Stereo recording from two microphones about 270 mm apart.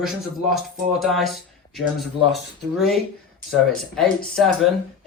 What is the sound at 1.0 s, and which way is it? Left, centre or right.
Speech, centre.